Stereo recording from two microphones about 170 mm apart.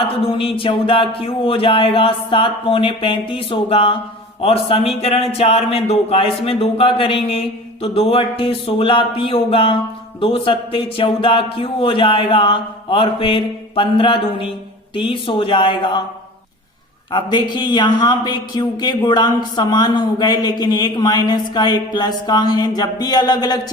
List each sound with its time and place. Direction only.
0.3 s a sound: 30° left (ahead or behind)
14.9 s a man's voice: 30° left (ahead or behind)
17.1 s a man's voice: 25° left (ahead or behind)